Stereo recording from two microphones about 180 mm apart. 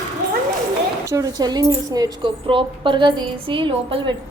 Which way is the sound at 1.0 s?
20° right (ahead or behind).